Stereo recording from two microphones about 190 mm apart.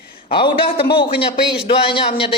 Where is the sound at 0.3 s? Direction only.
25° left (ahead or behind).